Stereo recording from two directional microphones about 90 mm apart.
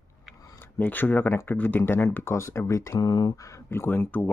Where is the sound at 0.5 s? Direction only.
20° left (ahead or behind).